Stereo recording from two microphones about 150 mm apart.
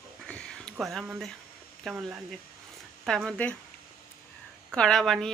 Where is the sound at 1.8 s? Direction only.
Centre (ahead or behind).